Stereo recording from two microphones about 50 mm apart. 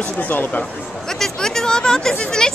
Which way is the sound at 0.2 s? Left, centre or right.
Left.